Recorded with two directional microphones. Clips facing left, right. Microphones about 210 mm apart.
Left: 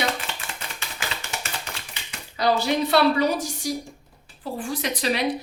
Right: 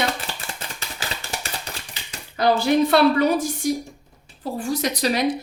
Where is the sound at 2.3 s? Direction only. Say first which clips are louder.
Right 4 dB; 50° right (ahead or behind).